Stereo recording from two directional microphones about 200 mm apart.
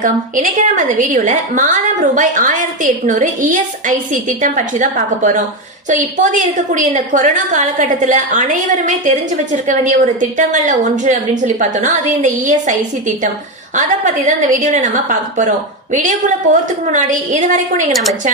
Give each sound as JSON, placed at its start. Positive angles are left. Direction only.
{"t": 0.0, "sound": "a woman's voice", "side_deg": -40}
{"t": 14.2, "sound": "a woman's voice", "side_deg": -40}